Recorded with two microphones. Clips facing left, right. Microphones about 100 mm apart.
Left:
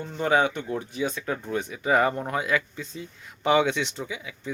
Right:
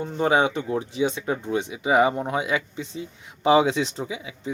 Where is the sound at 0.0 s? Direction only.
25° right (ahead or behind).